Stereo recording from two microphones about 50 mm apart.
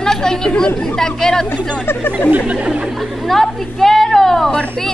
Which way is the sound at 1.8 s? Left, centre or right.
Left.